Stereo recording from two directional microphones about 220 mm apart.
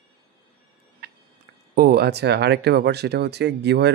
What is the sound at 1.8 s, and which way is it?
Speech, 45° right (ahead or behind).